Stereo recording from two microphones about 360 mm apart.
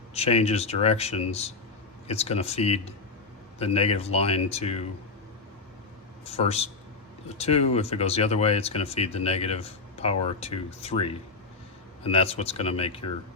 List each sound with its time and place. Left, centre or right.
0.1 s speech: centre
6.2 s speech: centre